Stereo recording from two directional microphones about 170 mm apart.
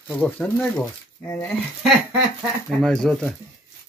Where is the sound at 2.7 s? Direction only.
Centre (ahead or behind).